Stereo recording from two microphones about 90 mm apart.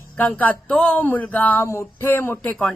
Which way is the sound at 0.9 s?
20° left (ahead or behind).